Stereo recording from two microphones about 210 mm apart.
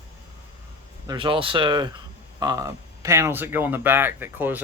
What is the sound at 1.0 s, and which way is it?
Speech, 20° right (ahead or behind).